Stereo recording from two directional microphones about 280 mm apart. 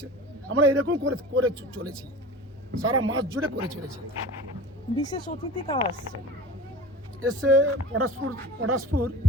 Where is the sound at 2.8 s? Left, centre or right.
Right.